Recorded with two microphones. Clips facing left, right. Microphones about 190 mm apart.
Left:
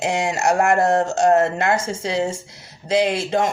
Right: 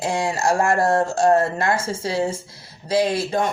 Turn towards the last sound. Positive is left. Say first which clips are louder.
# left 1 dB
turn(degrees=20)  # may be behind; listen again after turning